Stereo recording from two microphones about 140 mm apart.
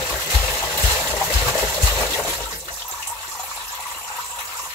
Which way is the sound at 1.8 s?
15° left (ahead or behind).